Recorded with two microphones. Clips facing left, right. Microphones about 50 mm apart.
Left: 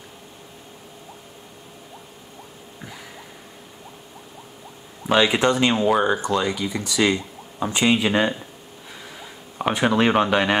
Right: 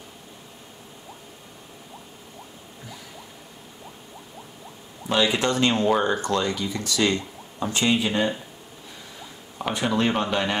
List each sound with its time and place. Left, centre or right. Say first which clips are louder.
5.1 s speech: left 4 dB; left
8.0 s speech: left 4 dB; left
9.6 s speech: left 4 dB; left